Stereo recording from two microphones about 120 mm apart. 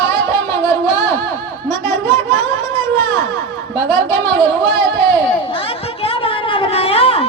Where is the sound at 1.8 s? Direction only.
65° right (ahead or behind).